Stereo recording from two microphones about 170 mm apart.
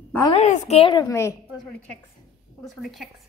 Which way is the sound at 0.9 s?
15° left (ahead or behind).